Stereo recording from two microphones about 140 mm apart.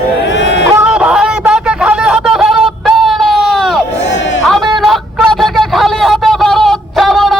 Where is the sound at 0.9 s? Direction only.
5° right (ahead or behind).